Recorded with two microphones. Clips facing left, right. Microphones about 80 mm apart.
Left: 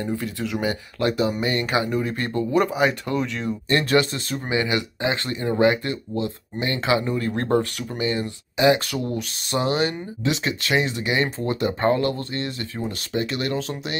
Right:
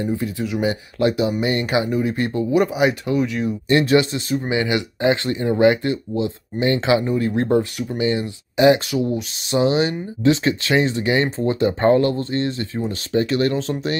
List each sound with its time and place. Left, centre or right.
0.0 s speech: centre
10.2 s speech: right